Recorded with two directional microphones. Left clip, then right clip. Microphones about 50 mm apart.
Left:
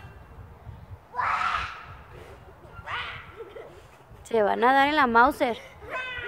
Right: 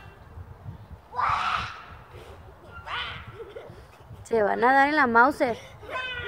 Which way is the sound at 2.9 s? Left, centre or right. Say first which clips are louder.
Even; right.